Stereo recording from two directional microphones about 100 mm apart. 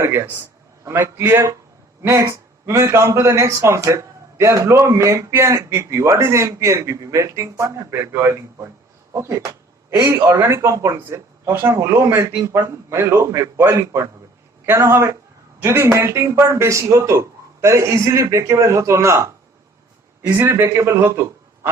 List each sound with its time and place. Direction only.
0.0 s a man's voice: 30° right (ahead or behind)